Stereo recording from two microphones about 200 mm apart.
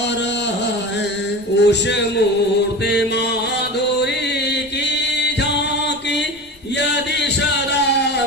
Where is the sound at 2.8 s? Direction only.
55° left (ahead or behind).